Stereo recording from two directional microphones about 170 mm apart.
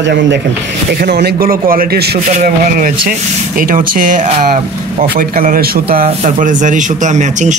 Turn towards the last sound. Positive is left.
turn(degrees=-45)  # may be behind; listen again after turning